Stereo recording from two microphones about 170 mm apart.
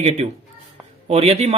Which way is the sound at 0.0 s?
40° right (ahead or behind).